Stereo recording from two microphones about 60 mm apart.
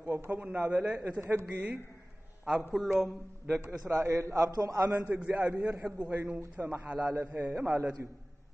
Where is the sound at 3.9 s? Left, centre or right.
Right.